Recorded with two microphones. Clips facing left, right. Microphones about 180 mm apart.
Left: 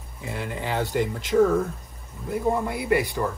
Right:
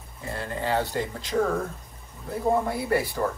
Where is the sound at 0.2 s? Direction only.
5° left (ahead or behind).